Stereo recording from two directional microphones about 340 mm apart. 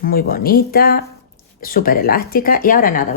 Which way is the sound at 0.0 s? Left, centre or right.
Left.